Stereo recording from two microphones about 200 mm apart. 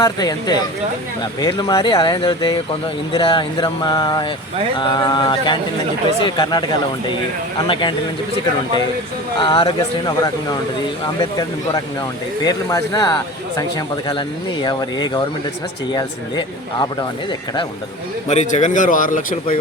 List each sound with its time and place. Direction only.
0.0 s speech: 20° left (ahead or behind)
7.7 s speech: 25° left (ahead or behind)
9.4 s speech: 25° left (ahead or behind)
18.3 s a man's voice: 35° left (ahead or behind)